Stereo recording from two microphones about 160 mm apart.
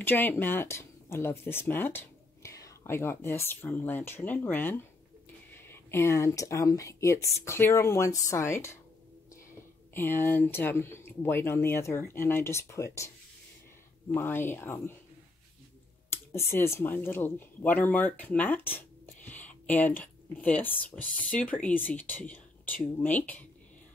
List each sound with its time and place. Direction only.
0.0 s speech: 10° left (ahead or behind)
9.9 s speech: 15° left (ahead or behind)
14.1 s speech: 15° left (ahead or behind)
16.1 s speech: 15° left (ahead or behind)